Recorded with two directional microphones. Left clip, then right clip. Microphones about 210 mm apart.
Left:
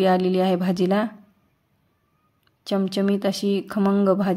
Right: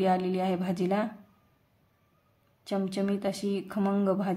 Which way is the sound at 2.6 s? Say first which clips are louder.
Left 8 dB; 30° left (ahead or behind).